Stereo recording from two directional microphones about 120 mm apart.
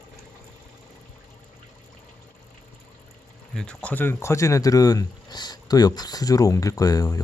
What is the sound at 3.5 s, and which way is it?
Speech, 5° left (ahead or behind).